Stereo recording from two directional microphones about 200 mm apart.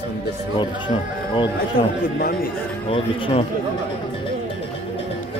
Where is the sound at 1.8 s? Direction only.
25° left (ahead or behind).